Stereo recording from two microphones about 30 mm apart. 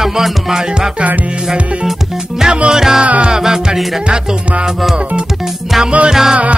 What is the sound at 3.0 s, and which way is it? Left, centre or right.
Music, right.